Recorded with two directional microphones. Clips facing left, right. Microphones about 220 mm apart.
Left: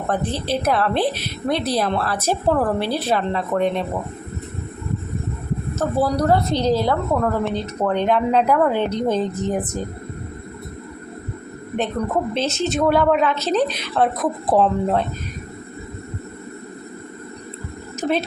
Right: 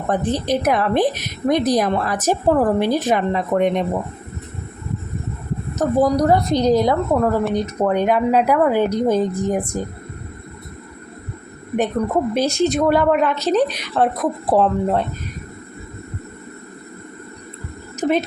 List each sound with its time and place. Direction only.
0.3 s a woman's voice: 15° right (ahead or behind)
5.7 s a woman's voice: 15° right (ahead or behind)
12.3 s a woman's voice: 10° right (ahead or behind)